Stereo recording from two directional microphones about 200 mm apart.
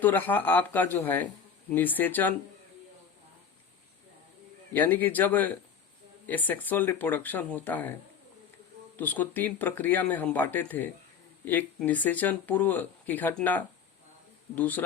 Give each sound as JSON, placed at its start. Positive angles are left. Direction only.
{"t": 0.0, "sound": "speech", "side_deg": 10}
{"t": 4.7, "sound": "speech", "side_deg": 10}
{"t": 9.0, "sound": "speech", "side_deg": 10}